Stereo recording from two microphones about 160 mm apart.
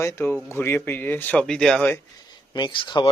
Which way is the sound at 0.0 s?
15° left (ahead or behind).